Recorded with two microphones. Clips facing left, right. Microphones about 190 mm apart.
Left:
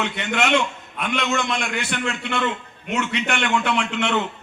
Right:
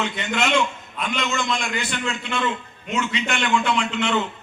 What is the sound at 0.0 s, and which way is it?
A man's voice, 65° left (ahead or behind).